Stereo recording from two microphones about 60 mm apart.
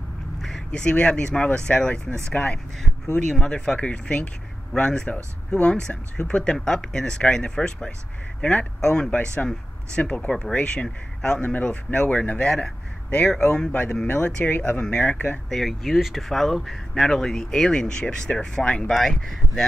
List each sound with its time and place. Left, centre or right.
0.4 s a sound: centre
0.7 s speech: centre
15.5 s speech: centre
18.9 s speech: centre